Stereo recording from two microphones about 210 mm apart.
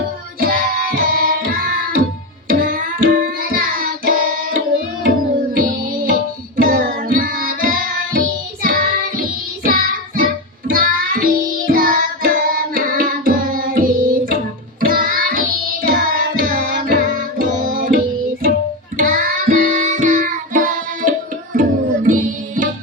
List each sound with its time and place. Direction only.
0.3 s music: 45° right (ahead or behind)
5.5 s music: 45° right (ahead or behind)
8.6 s child singing: 45° right (ahead or behind)
9.6 s music: 40° right (ahead or behind)
21.5 s tabla: 40° right (ahead or behind)